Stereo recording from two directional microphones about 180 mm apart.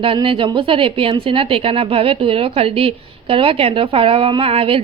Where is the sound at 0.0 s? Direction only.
30° right (ahead or behind).